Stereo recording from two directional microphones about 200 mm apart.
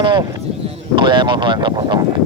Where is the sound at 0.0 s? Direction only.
20° right (ahead or behind).